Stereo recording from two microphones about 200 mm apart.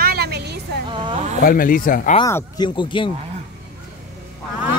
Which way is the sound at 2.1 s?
15° left (ahead or behind).